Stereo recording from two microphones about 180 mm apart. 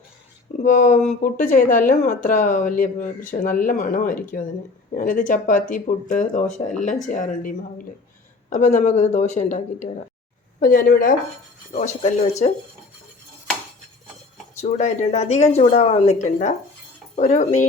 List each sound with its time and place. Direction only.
0.6 s a woman's voice: 45° left (ahead or behind)
10.6 s speech: 50° left (ahead or behind)
11.7 s a woman's voice: 40° left (ahead or behind)
14.6 s a woman's voice: 40° left (ahead or behind)